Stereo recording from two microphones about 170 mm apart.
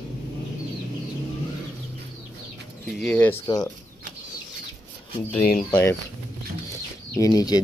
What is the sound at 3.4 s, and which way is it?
Speech, 25° left (ahead or behind).